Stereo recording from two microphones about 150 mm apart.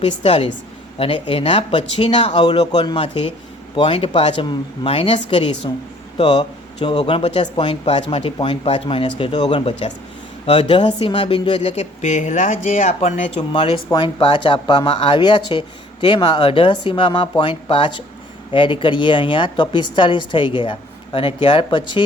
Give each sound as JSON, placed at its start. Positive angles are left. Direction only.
{"t": 0.2, "sound": "speech", "side_deg": 40}
{"t": 2.4, "sound": "speech", "side_deg": 30}
{"t": 13.5, "sound": "speech", "side_deg": 35}